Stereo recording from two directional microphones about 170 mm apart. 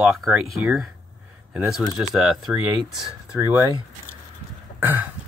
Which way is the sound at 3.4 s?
15° right (ahead or behind).